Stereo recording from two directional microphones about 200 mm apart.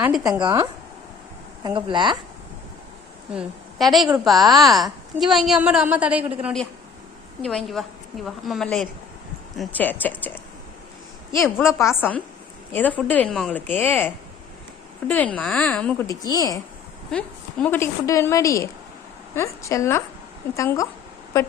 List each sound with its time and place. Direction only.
0.0 s speech: centre (ahead or behind)
0.4 s speech: 15° right (ahead or behind)
3.3 s a woman's voice: centre (ahead or behind)
11.4 s a woman's voice: centre (ahead or behind)
11.8 s a woman's voice: 10° left (ahead or behind)
16.0 s a woman's voice: 20° left (ahead or behind)
17.1 s a woman's voice: 5° left (ahead or behind)